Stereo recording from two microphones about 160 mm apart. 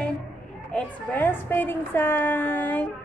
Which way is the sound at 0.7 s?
10° left (ahead or behind).